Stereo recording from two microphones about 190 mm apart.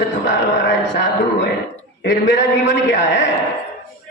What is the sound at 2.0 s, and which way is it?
A man's voice, 65° left (ahead or behind).